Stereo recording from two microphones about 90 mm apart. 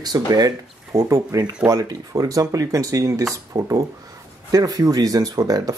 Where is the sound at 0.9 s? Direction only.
30° right (ahead or behind).